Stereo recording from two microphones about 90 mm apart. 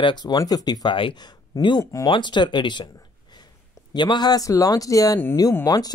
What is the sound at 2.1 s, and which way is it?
Speech, 60° left (ahead or behind).